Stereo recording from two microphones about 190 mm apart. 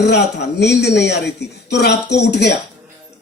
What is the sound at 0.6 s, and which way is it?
Speech, 65° left (ahead or behind).